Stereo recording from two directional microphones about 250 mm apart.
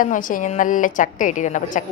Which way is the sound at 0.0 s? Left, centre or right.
Left.